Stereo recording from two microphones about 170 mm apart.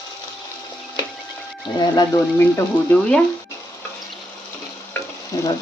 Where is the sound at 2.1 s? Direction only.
10° left (ahead or behind).